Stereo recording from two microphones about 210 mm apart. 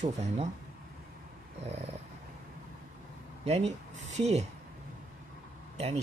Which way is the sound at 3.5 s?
30° right (ahead or behind).